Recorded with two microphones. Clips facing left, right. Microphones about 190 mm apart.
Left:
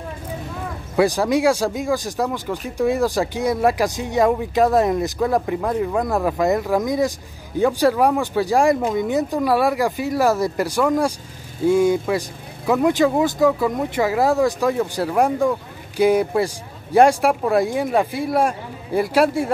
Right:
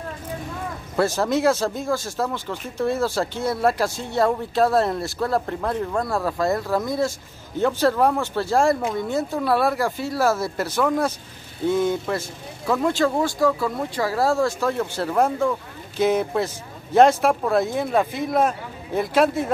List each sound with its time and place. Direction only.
0.9 s speech: 15° left (ahead or behind)